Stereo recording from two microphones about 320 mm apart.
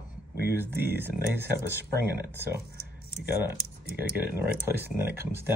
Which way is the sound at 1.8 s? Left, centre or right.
Right.